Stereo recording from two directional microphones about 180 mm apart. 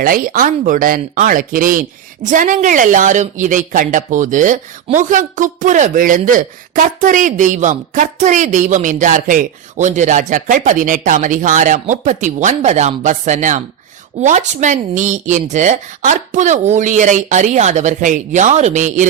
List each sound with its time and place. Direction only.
0.0 s a woman's voice: 50° right (ahead or behind)